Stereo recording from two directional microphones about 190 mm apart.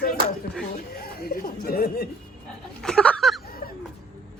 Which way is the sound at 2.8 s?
5° left (ahead or behind).